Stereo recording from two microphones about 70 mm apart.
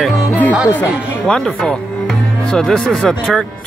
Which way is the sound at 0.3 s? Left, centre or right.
Left.